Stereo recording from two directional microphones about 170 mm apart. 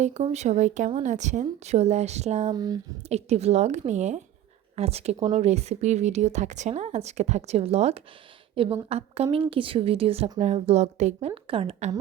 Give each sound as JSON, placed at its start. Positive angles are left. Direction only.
{"t": 0.0, "sound": "a woman's voice", "side_deg": -40}
{"t": 2.5, "sound": "speech", "side_deg": -25}
{"t": 3.1, "sound": "a woman's voice", "side_deg": -40}